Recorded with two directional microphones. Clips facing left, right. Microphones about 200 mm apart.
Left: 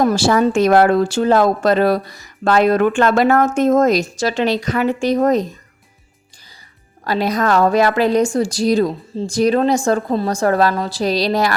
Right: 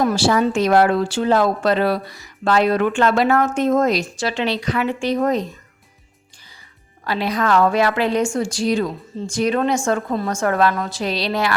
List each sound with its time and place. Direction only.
0.0 s speech: 45° left (ahead or behind)
7.0 s a woman's voice: 40° left (ahead or behind)